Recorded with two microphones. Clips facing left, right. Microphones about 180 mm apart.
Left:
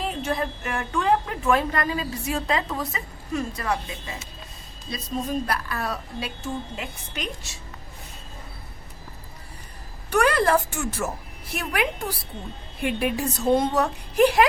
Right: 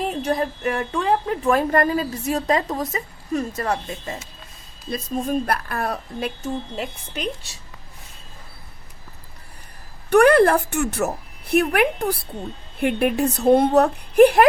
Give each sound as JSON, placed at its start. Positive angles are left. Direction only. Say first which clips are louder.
{"t": 0.0, "sound": "a woman's voice", "louder": "right 4 dB", "side_deg": -40}
{"t": 10.1, "sound": "a woman's voice", "louder": "right 7 dB", "side_deg": -60}